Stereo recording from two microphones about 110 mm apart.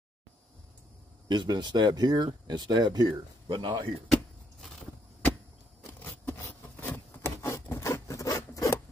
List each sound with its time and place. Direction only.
1.3 s speech: 40° right (ahead or behind)
4.1 s a sound: 5° left (ahead or behind)
6.0 s rub: 20° left (ahead or behind)